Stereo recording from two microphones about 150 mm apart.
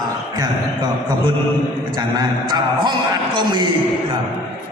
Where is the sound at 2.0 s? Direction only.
30° right (ahead or behind).